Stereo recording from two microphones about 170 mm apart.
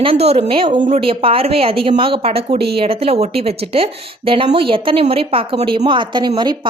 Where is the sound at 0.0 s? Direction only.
35° right (ahead or behind).